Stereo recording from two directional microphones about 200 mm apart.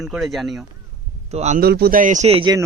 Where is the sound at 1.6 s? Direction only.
50° right (ahead or behind); by 2.6 s 25° right (ahead or behind).